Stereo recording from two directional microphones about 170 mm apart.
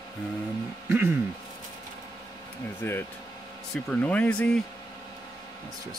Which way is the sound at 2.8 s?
15° left (ahead or behind).